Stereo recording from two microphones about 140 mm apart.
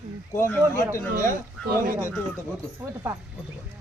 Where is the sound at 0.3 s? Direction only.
15° left (ahead or behind).